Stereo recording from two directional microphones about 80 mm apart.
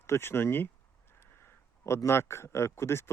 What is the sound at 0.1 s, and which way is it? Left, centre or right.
Speech, left.